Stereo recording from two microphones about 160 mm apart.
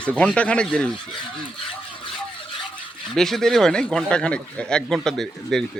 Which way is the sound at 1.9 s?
30° left (ahead or behind).